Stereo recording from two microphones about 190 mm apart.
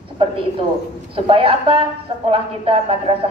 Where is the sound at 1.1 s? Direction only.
30° right (ahead or behind).